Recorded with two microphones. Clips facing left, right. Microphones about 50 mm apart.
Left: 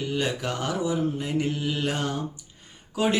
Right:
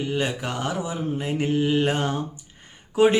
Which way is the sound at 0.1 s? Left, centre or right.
Centre.